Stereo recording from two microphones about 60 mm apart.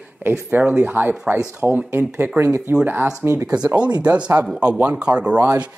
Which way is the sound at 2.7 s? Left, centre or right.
Right.